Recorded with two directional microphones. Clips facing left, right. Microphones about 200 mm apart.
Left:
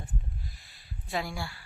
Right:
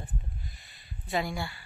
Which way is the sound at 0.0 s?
Centre (ahead or behind).